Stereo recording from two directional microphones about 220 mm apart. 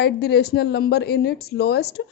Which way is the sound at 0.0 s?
50° left (ahead or behind).